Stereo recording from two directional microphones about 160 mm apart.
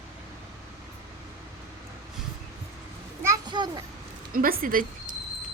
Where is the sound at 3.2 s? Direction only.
25° right (ahead or behind).